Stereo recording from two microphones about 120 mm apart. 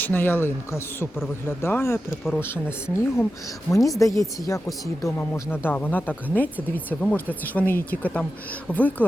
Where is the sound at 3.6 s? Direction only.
30° left (ahead or behind).